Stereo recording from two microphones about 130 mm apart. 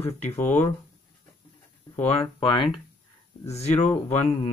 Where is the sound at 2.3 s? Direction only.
40° left (ahead or behind).